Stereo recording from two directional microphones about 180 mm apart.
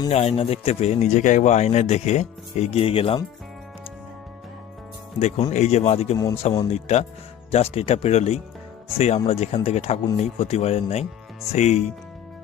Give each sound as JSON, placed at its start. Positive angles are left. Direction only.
{"t": 0.1, "sound": "speech", "side_deg": 35}
{"t": 5.2, "sound": "speech", "side_deg": 40}
{"t": 6.1, "sound": "speech", "side_deg": 20}
{"t": 6.7, "sound": "speech", "side_deg": 35}